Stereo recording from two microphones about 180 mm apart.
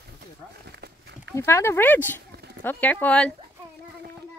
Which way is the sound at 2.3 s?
65° right (ahead or behind).